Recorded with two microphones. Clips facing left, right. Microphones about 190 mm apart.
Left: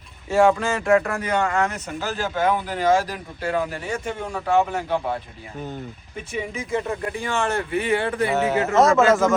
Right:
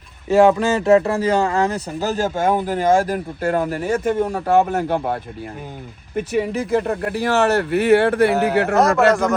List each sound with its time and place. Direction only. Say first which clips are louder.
0.3 s speech: right 4 dB; 20° right (ahead or behind); by 4.5 s 40° right (ahead or behind)
4.5 s speech: right 4 dB; 50° right (ahead or behind)
6.1 s speech: right 9 dB; 65° right (ahead or behind)
8.3 s speech: right 4 dB; centre (ahead or behind)